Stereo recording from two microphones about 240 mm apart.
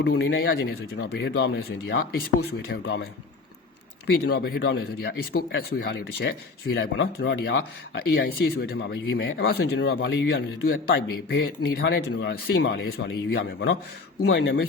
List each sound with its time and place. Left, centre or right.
0.0 s a man's voice: left
4.0 s a man's voice: left